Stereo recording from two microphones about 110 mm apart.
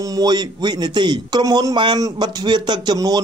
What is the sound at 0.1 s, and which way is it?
A man's voice, 40° right (ahead or behind).